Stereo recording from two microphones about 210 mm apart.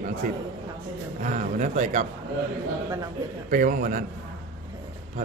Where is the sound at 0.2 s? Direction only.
40° right (ahead or behind).